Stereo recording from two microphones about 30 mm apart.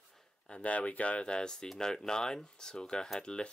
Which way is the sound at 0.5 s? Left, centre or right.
Left.